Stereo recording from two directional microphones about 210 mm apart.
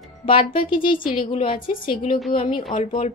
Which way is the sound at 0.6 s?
25° left (ahead or behind).